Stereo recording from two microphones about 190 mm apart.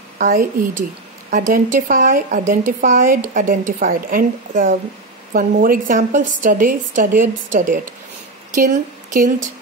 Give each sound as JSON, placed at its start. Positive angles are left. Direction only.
{"t": 0.2, "sound": "a woman's voice", "side_deg": -40}